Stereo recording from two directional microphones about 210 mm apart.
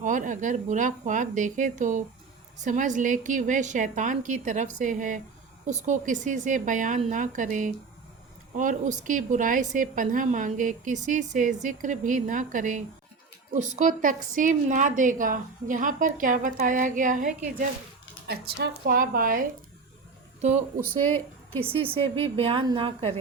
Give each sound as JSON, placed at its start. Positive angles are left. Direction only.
{"t": 0.0, "sound": "a woman's voice", "side_deg": -35}
{"t": 18.3, "sound": "a woman's voice", "side_deg": -50}
{"t": 21.6, "sound": "a woman's voice", "side_deg": -25}